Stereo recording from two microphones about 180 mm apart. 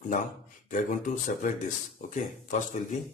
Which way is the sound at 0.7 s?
45° left (ahead or behind).